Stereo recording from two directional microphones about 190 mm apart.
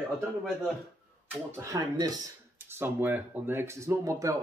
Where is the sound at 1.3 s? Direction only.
15° right (ahead or behind).